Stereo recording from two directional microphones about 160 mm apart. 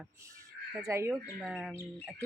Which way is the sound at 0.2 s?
20° right (ahead or behind).